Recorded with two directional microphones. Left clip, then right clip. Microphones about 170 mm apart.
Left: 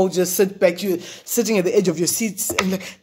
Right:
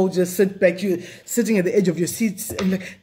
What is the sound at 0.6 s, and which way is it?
Speech, 40° left (ahead or behind).